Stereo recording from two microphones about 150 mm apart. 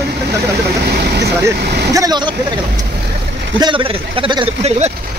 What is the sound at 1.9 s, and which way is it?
Speech, 25° right (ahead or behind).